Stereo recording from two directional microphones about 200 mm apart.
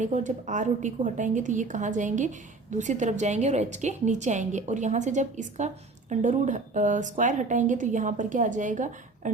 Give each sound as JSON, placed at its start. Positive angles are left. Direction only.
{"t": 0.0, "sound": "a woman's voice", "side_deg": -40}